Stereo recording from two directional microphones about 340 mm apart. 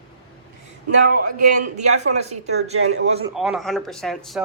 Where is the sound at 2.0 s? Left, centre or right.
Centre.